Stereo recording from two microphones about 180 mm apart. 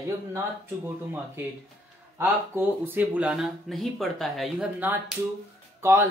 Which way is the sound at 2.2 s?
10° right (ahead or behind).